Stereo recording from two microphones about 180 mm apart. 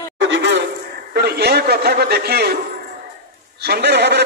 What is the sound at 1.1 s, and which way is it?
A man's voice, 65° right (ahead or behind).